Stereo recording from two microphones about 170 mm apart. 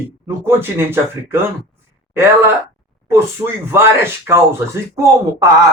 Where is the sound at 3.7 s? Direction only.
15° right (ahead or behind).